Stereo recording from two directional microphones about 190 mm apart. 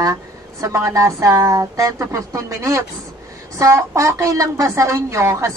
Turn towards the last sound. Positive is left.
turn(degrees=-15)  # may be behind; listen again after turning